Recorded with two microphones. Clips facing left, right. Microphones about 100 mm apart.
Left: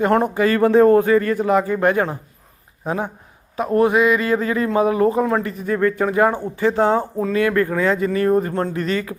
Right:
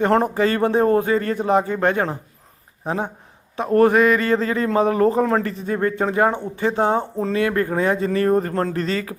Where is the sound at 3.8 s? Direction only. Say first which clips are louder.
Right 1 dB; 40° right (ahead or behind).